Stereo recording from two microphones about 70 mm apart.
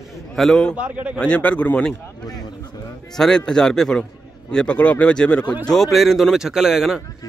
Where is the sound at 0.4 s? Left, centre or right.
Centre.